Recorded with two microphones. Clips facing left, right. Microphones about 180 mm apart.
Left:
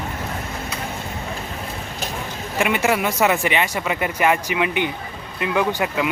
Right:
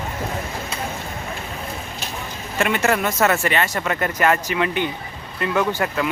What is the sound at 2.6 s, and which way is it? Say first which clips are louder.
Speech: even; 10° left (ahead or behind).